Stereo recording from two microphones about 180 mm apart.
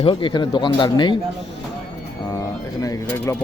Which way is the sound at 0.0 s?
30° left (ahead or behind).